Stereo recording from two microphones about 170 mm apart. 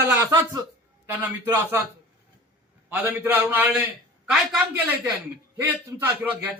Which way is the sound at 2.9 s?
10° right (ahead or behind).